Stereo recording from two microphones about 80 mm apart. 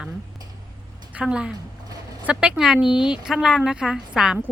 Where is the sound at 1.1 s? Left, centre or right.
Centre.